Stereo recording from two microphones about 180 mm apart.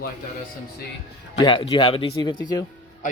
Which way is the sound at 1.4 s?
25° left (ahead or behind).